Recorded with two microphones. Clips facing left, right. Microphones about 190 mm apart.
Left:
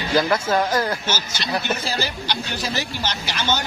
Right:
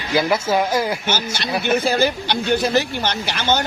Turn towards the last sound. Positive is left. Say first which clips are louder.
# right 4 dB
turn(degrees=-55)  # may be behind; listen again after turning